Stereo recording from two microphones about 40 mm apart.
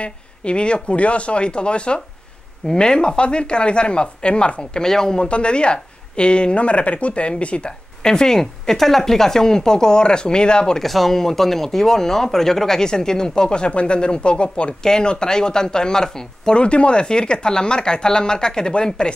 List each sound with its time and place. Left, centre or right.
0.0 s speech: left
4.8 s speech: centre
8.0 s speech: centre
10.8 s speech: centre; by 14.8 s left
14.8 s speech: centre
16.6 s speech: left